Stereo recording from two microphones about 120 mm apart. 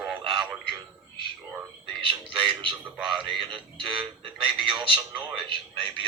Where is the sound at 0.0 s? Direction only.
10° right (ahead or behind).